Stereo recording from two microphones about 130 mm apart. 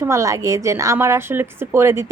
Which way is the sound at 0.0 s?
25° right (ahead or behind).